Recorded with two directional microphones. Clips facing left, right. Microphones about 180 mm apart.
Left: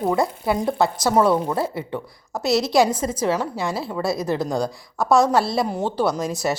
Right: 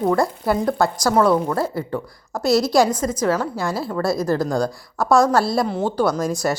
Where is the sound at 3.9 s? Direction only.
Centre (ahead or behind).